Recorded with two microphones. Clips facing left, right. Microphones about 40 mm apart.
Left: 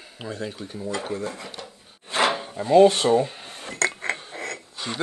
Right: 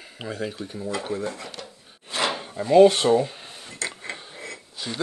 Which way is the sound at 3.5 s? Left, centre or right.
Left.